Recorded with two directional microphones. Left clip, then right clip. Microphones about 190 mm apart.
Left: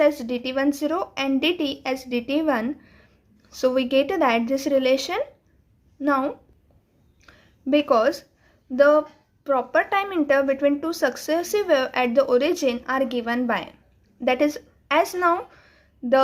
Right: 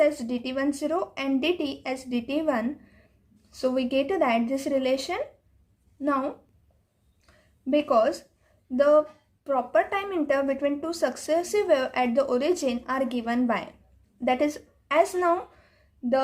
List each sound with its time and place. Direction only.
0.0 s a woman's voice: 25° left (ahead or behind)
7.3 s a sound: 30° left (ahead or behind)
8.7 s a woman's voice: 25° left (ahead or behind)